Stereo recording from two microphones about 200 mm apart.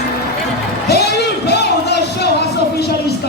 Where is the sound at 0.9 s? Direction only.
55° left (ahead or behind).